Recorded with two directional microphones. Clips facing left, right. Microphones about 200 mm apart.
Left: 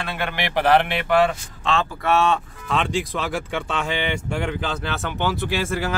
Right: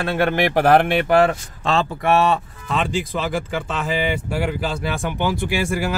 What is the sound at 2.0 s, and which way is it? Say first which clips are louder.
Speech: right 2 dB; 10° right (ahead or behind).